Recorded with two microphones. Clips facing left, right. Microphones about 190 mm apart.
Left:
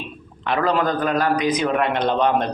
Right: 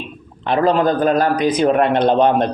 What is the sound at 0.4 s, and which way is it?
A man's voice, 25° right (ahead or behind).